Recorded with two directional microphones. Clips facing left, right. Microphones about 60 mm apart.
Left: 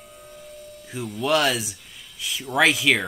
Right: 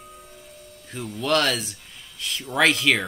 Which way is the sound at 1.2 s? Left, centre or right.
Centre.